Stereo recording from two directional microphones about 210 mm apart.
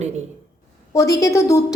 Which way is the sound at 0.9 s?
15° left (ahead or behind).